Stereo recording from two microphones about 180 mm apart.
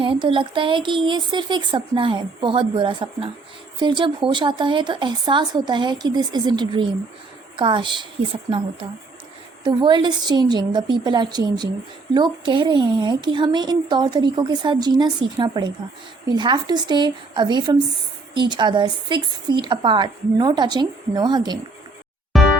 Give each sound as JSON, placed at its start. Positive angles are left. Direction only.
{"t": 0.0, "sound": "speech", "side_deg": -30}
{"t": 22.3, "sound": "music", "side_deg": 0}